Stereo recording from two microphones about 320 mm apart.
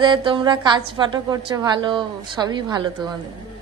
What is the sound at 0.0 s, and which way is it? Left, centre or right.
A woman's voice, centre.